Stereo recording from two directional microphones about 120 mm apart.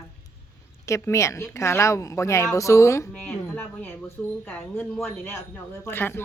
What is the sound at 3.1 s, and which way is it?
A woman's voice, 10° left (ahead or behind).